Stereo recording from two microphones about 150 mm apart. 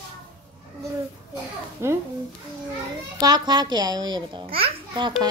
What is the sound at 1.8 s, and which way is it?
Speech, 15° right (ahead or behind).